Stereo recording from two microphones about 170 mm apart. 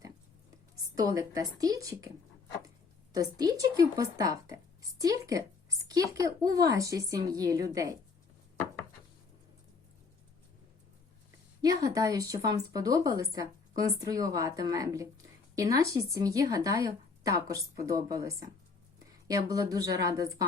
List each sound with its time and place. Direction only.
0.9 s speech: 20° right (ahead or behind)
3.1 s speech: 20° right (ahead or behind)
11.6 s speech: 20° right (ahead or behind)